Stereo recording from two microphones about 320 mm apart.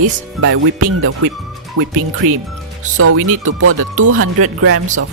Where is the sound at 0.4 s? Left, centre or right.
Right.